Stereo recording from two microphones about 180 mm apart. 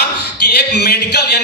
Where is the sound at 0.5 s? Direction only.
65° left (ahead or behind).